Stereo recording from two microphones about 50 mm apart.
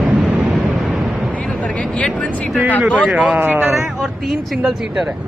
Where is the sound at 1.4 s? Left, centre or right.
Left.